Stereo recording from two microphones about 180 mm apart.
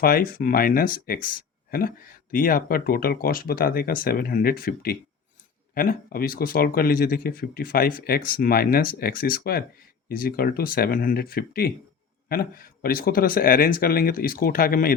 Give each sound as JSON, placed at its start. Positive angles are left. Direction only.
{"t": 0.0, "sound": "speech", "side_deg": 55}